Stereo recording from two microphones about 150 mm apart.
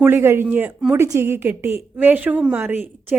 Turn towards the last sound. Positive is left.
turn(degrees=-15)  # may be behind; listen again after turning